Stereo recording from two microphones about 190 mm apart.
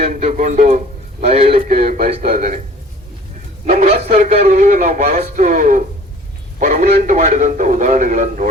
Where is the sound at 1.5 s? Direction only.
45° right (ahead or behind).